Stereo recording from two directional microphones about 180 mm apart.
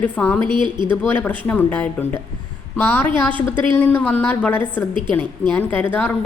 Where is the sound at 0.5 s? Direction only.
25° right (ahead or behind).